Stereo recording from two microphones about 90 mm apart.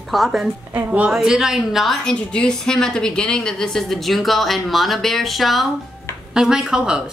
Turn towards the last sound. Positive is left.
turn(degrees=-10)  # may be behind; listen again after turning